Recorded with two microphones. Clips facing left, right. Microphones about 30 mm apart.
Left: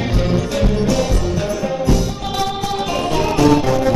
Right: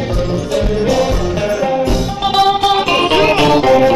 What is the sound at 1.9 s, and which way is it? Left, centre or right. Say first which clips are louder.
Music: right 4 dB; right.